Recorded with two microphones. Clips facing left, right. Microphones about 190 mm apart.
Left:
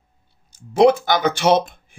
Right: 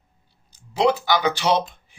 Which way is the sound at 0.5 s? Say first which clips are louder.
Left 6 dB; 50° left (ahead or behind).